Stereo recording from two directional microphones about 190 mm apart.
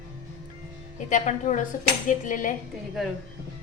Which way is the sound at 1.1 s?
40° left (ahead or behind).